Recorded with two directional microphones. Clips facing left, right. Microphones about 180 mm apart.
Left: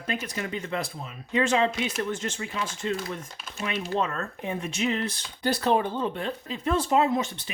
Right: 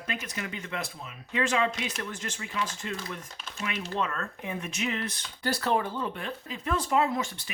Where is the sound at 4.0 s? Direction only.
25° left (ahead or behind).